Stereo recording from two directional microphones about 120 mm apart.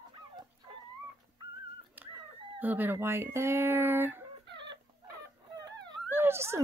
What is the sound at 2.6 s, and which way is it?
Speech, 15° right (ahead or behind).